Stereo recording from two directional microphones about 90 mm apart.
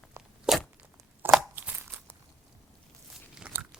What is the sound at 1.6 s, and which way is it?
Crunch, 20° right (ahead or behind).